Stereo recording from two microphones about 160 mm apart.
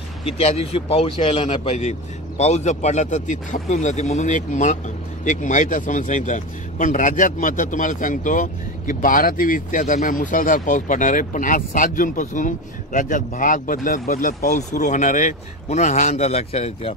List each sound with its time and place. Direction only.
0.4 s speech: 40° left (ahead or behind)